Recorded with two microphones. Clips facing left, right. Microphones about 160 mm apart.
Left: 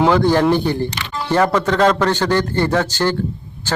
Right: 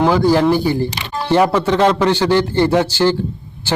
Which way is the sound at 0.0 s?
5° right (ahead or behind).